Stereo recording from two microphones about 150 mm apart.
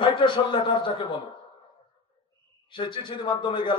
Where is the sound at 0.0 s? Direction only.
30° left (ahead or behind).